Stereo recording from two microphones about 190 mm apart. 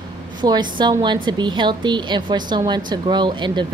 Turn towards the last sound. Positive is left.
turn(degrees=-25)  # may be behind; listen again after turning